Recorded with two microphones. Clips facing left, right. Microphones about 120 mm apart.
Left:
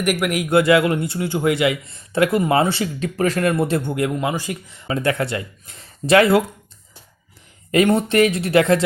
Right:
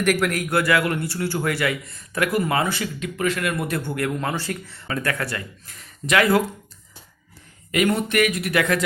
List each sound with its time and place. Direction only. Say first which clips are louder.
0.0 s a man's voice: left 1 dB; 10° left (ahead or behind); by 6.4 s 25° left (ahead or behind)
7.7 s a man's voice: left 5 dB; 30° left (ahead or behind)